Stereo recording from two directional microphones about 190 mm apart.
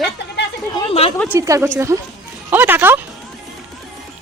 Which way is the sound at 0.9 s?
30° left (ahead or behind).